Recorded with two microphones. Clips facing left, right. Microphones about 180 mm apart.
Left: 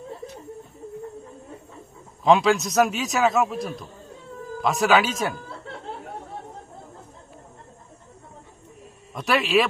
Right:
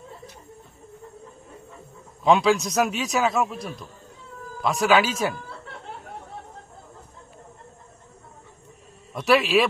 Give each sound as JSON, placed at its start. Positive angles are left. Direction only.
{"t": 2.2, "sound": "a man's voice", "side_deg": 0}
{"t": 9.1, "sound": "a man's voice", "side_deg": 0}